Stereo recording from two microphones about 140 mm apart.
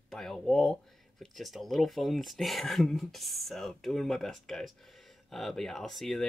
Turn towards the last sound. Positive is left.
turn(degrees=0)  # may be behind; listen again after turning